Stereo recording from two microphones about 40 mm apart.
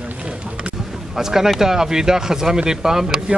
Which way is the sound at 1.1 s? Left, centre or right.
Centre.